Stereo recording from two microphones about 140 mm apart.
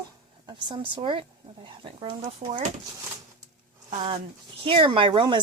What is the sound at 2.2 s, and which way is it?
Speech, 55° right (ahead or behind).